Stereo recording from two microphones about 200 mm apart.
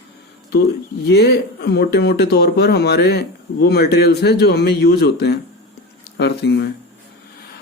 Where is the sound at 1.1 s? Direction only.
55° left (ahead or behind).